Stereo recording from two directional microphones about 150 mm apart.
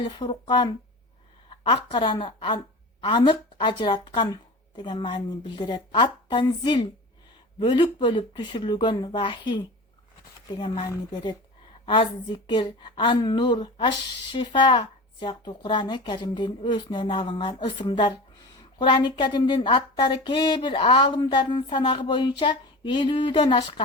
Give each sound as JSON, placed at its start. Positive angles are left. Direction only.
{"t": 0.0, "sound": "speech", "side_deg": 30}
{"t": 10.6, "sound": "speech", "side_deg": 30}